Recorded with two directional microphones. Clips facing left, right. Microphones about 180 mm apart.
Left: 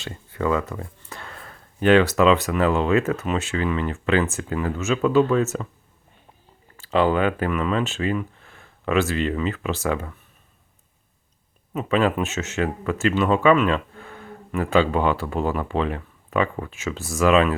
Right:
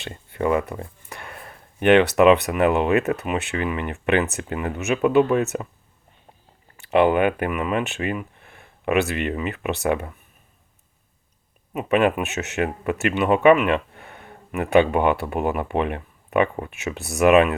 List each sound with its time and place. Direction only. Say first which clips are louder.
0.3 s speech: right 2 dB; 20° right (ahead or behind)
1.1 s a sound: right 1 dB; 15° right (ahead or behind)
2.1 s speech: right 3 dB; 20° right (ahead or behind)
6.7 s speech: right 2 dB; 20° right (ahead or behind)
11.7 s speech: right 1 dB; 15° right (ahead or behind)